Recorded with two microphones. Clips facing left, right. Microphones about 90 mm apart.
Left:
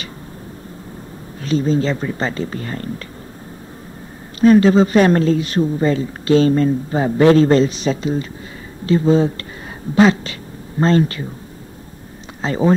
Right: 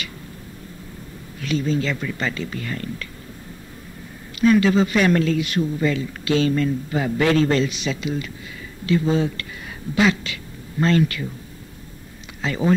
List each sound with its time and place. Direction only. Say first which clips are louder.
1.4 s speech: left 5 dB; 35° left (ahead or behind)
4.4 s speech: left 5 dB; 35° left (ahead or behind)
12.4 s speech: left 5 dB; 35° left (ahead or behind)